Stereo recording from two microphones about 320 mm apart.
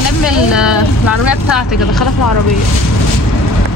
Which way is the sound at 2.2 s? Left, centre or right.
Left.